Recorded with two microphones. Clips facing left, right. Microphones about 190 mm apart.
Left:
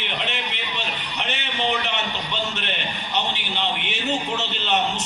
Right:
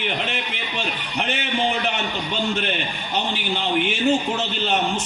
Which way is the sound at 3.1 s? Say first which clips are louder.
Right 3 dB; 50° right (ahead or behind).